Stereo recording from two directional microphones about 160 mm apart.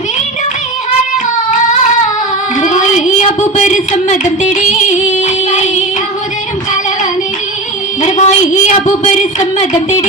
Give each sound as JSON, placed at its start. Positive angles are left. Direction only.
{"t": 2.6, "sound": "child singing", "side_deg": 50}
{"t": 3.4, "sound": "music", "side_deg": 50}
{"t": 8.0, "sound": "a woman's voice", "side_deg": 50}